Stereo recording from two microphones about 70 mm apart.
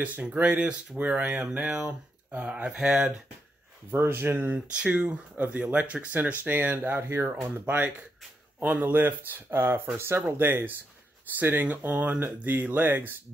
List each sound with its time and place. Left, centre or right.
0.0 s speech: right
3.9 s speech: right
4.7 s speech: centre